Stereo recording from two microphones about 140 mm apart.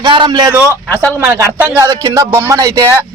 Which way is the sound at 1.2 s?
20° right (ahead or behind).